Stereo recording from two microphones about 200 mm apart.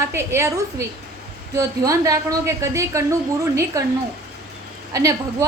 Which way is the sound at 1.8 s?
15° right (ahead or behind).